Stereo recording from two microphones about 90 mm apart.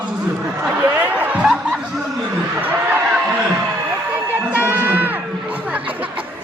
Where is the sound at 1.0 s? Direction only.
15° right (ahead or behind).